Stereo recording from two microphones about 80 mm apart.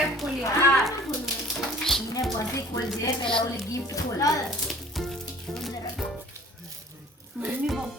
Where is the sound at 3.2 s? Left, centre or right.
Left.